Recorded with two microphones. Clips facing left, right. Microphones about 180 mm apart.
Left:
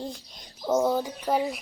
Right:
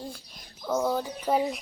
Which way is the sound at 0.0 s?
25° left (ahead or behind).